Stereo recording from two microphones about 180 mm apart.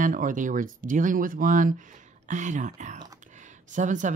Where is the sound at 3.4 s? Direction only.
45° right (ahead or behind).